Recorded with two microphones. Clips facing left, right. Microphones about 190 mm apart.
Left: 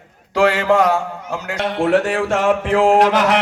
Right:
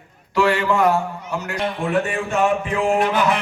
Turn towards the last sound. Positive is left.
turn(degrees=85)